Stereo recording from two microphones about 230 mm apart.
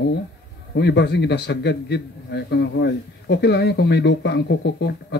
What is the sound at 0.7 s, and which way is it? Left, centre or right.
A man's voice, left.